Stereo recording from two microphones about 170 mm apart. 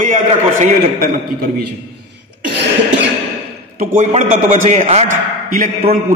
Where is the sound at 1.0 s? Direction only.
60° right (ahead or behind).